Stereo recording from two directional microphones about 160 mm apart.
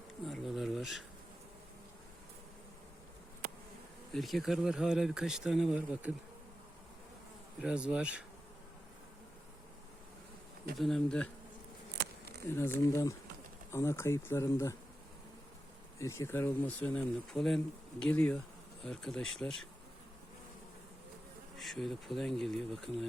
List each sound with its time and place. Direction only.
0.3 s a sound: centre (ahead or behind)
4.1 s speech: centre (ahead or behind)
7.6 s bee: 5° right (ahead or behind)
10.8 s speech: centre (ahead or behind)
12.5 s speech: 15° left (ahead or behind)
16.0 s speech: 20° left (ahead or behind)
21.6 s speech: centre (ahead or behind)